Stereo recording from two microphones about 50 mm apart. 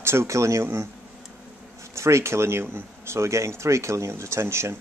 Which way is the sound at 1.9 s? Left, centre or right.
Right.